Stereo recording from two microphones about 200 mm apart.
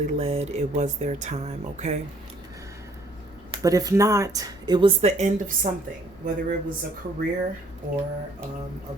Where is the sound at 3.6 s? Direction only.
15° right (ahead or behind); by 5.7 s 35° right (ahead or behind).